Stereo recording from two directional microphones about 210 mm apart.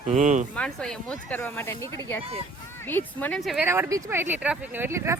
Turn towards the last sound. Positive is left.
turn(degrees=-10)  # may be behind; listen again after turning